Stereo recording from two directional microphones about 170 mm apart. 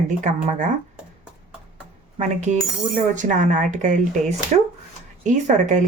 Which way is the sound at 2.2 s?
45° right (ahead or behind).